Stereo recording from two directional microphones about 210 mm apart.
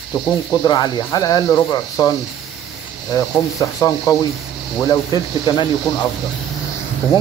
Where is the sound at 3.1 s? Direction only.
15° left (ahead or behind).